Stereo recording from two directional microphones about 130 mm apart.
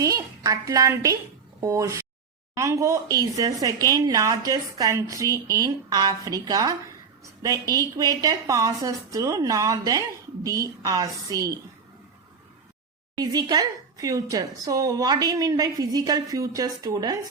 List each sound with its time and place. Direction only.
0.0 s a woman's voice: 25° right (ahead or behind)
13.1 s a woman's voice: 30° right (ahead or behind)